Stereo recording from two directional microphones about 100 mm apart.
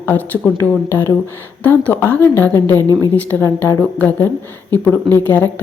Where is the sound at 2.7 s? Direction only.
35° right (ahead or behind).